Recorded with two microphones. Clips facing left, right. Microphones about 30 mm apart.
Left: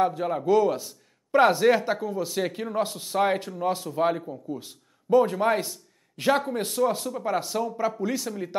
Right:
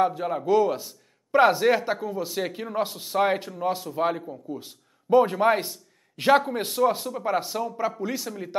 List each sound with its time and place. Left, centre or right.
0.0 s a man's voice: centre
5.1 s a man's voice: right; by 8.5 s centre